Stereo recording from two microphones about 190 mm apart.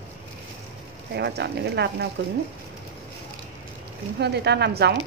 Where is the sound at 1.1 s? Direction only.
60° right (ahead or behind).